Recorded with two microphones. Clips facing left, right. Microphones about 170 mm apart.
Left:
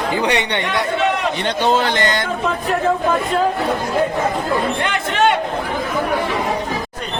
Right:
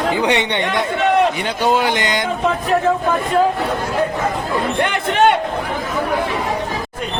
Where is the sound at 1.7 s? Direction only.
10° right (ahead or behind).